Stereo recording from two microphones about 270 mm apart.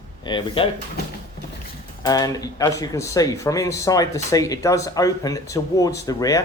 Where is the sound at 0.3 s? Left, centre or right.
Centre.